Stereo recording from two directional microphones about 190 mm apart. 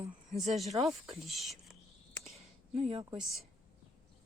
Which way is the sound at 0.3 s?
Centre (ahead or behind).